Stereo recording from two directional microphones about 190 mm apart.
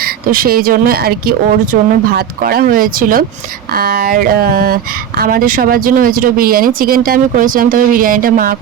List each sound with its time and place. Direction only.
0.0 s speech: 50° right (ahead or behind)